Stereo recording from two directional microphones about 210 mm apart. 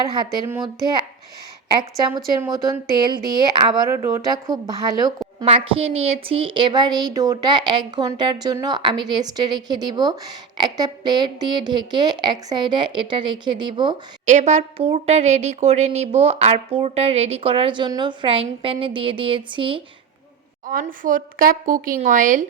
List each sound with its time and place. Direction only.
0.0 s speech: 15° right (ahead or behind)
2.0 s speech: 20° right (ahead or behind)
14.3 s speech: 35° right (ahead or behind)
20.7 s a woman's voice: 40° right (ahead or behind)